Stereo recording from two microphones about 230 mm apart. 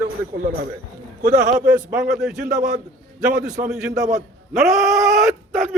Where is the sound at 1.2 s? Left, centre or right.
Right.